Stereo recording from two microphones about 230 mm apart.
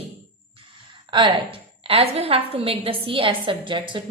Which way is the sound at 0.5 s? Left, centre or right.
Right.